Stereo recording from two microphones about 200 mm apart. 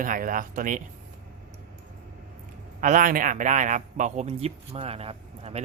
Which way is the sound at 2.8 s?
40° right (ahead or behind).